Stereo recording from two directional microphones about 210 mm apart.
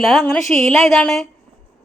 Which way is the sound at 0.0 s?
Centre (ahead or behind).